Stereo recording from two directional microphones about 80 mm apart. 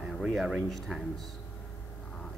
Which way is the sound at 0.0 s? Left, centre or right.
Centre.